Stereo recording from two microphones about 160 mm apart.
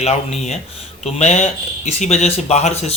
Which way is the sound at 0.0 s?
45° left (ahead or behind).